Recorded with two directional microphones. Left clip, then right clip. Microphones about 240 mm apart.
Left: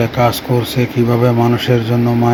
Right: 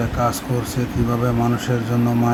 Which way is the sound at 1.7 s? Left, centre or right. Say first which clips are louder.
Left 8 dB; centre.